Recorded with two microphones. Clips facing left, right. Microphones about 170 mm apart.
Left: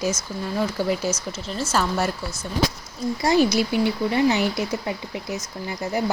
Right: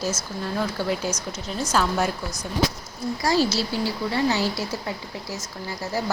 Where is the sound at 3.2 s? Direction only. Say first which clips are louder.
Left 3 dB; 20° left (ahead or behind).